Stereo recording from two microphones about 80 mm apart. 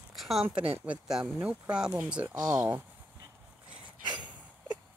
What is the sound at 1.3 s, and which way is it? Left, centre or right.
Speech, right.